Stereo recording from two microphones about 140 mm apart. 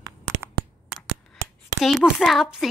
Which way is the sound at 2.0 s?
Centre (ahead or behind).